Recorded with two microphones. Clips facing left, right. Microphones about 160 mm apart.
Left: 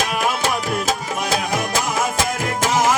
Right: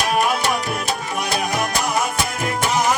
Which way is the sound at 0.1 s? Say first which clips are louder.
Right 2 dB; 90° left.